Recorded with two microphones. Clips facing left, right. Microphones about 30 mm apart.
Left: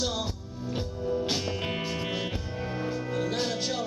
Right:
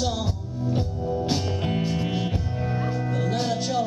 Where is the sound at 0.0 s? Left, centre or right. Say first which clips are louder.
Right 4 dB; centre.